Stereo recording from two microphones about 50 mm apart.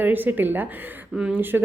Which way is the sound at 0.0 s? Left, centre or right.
Right.